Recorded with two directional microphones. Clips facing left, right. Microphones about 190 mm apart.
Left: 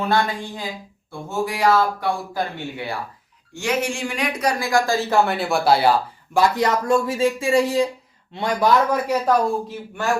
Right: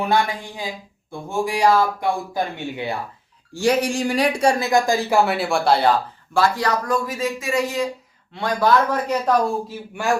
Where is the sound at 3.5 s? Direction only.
35° right (ahead or behind); by 6.4 s 10° left (ahead or behind).